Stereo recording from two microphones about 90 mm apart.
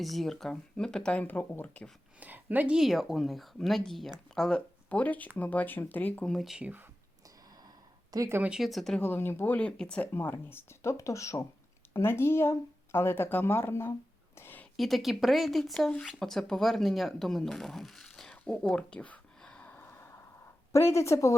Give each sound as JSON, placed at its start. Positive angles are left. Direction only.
{"t": 0.0, "sound": "speech", "side_deg": 0}
{"t": 2.2, "sound": "speech", "side_deg": -20}
{"t": 2.7, "sound": "speech", "side_deg": 0}
{"t": 4.9, "sound": "speech", "side_deg": 20}
{"t": 6.2, "sound": "speech", "side_deg": 0}
{"t": 6.6, "sound": "speech", "side_deg": -20}
{"t": 8.1, "sound": "speech", "side_deg": -45}
{"t": 8.4, "sound": "speech", "side_deg": -5}
{"t": 9.0, "sound": "speech", "side_deg": 25}
{"t": 10.1, "sound": "speech", "side_deg": 25}
{"t": 14.3, "sound": "a sound", "side_deg": 25}
{"t": 14.8, "sound": "speech", "side_deg": 0}
{"t": 20.7, "sound": "speech", "side_deg": 30}